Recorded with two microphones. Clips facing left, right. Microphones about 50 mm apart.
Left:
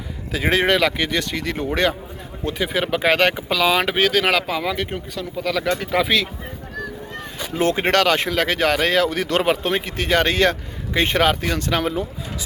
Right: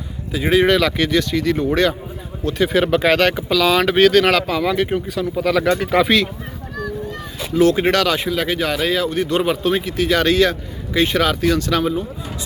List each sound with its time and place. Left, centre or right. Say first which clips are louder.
0.6 s speech: right 2 dB; left
0.9 s speech: right 5 dB; centre
1.2 s speech: right 6 dB; left
2.6 s speech: right 6 dB; centre
3.1 s speech: right 2 dB; left
3.9 s speech: right 5 dB; centre
4.7 s speech: right 6 dB; centre
7.5 s speech: right 4 dB; left
8.2 s speech: left 1 dB; left
9.4 s speech: right 2 dB; left
11.8 s speech: right 2 dB; left